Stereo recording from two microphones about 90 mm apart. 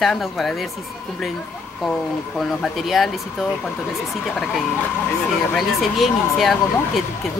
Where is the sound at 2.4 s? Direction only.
5° left (ahead or behind).